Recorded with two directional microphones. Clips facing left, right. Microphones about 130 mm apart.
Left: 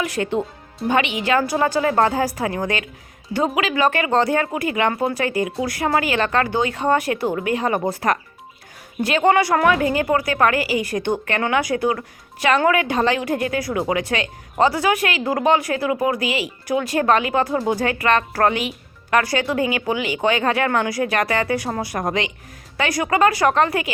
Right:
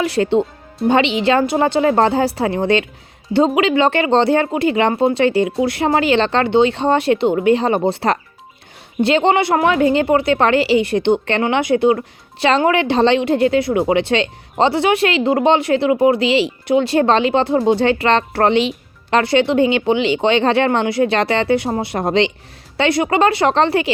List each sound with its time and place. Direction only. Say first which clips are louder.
0.0 s speech: right 6 dB; 30° right (ahead or behind)